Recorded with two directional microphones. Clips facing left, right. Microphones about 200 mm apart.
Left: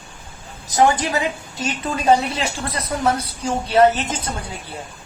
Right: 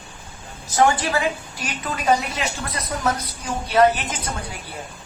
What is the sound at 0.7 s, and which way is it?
A woman's voice, 20° left (ahead or behind).